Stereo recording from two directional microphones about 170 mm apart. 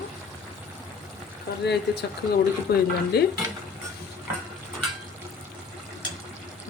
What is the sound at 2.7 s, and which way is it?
Speech, 70° left (ahead or behind).